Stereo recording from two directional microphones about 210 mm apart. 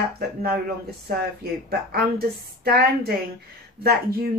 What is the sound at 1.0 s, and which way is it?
Speech, 45° right (ahead or behind).